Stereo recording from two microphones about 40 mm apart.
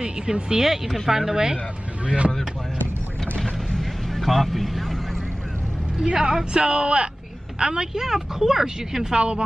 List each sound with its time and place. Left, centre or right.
0.0 s a woman's voice: centre
2.0 s speech: right
3.7 s vehicle: centre
5.9 s a woman's voice: centre